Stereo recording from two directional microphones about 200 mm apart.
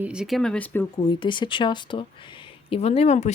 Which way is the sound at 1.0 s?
25° left (ahead or behind).